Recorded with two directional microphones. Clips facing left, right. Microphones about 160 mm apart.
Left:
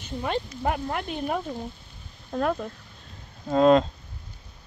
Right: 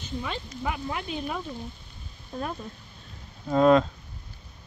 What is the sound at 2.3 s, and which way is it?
Speech, 85° left.